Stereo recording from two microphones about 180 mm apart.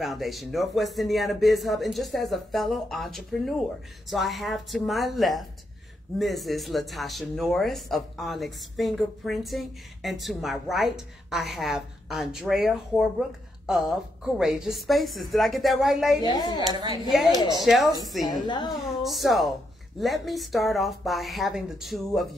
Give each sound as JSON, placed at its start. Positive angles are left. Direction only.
{"t": 0.0, "sound": "speech", "side_deg": 0}
{"t": 16.2, "sound": "a woman's voice", "side_deg": 25}
{"t": 16.6, "sound": "a woman's voice", "side_deg": -25}
{"t": 17.6, "sound": "speech", "side_deg": 0}
{"t": 18.2, "sound": "a woman's voice", "side_deg": 25}
{"t": 18.8, "sound": "speech", "side_deg": 0}